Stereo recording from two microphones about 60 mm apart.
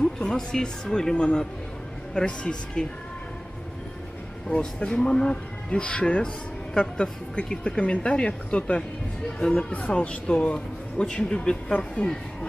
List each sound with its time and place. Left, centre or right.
0.0 s speech: centre
4.5 s speech: centre